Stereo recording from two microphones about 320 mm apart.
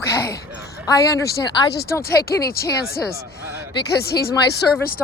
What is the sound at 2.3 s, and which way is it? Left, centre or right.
Speech, left.